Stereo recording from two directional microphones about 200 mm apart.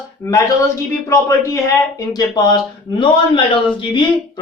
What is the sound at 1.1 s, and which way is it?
Speech, 15° left (ahead or behind).